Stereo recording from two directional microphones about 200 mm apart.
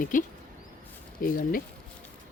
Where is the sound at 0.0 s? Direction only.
40° left (ahead or behind).